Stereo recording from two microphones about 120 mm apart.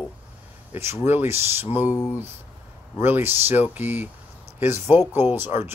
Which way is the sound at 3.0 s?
20° right (ahead or behind).